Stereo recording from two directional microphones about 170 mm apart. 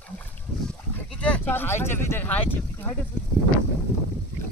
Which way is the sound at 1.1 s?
5° left (ahead or behind).